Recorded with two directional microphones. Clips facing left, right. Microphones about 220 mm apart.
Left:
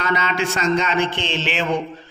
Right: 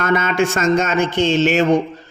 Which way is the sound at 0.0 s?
50° right (ahead or behind).